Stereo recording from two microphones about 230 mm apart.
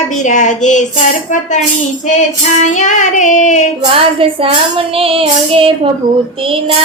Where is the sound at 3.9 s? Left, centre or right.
Right.